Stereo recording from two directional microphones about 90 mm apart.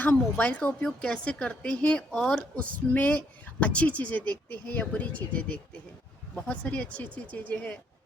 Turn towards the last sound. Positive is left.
turn(degrees=15)  # may be behind; listen again after turning